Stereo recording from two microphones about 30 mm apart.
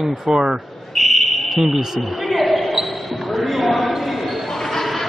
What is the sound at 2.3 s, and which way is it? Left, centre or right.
Basketball bounce, centre.